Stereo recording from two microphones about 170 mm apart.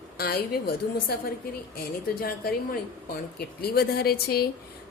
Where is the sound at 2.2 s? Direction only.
60° left (ahead or behind).